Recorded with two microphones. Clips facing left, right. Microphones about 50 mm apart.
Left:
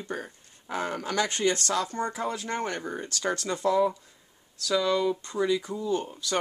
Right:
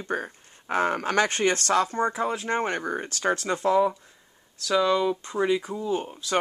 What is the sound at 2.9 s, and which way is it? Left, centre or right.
Speech, right.